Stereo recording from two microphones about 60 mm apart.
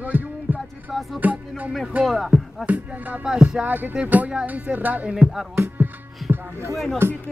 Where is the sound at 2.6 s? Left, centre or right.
Right.